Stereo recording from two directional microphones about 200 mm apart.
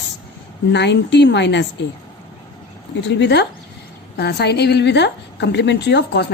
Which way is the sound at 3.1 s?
60° left (ahead or behind).